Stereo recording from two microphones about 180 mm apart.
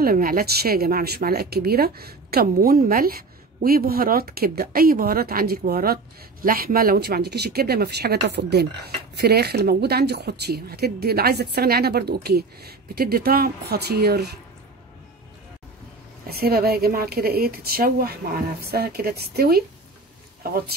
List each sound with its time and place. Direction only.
0.0 s speech: 55° right (ahead or behind)
16.3 s speech: 60° right (ahead or behind)